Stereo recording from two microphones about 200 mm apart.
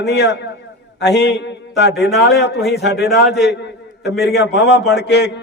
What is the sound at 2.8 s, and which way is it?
A man's voice, 55° left (ahead or behind).